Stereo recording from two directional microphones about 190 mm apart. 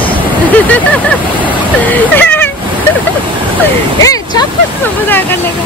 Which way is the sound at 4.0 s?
20° left (ahead or behind).